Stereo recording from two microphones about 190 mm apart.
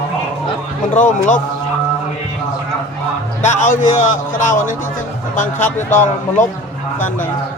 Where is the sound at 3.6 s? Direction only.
40° left (ahead or behind).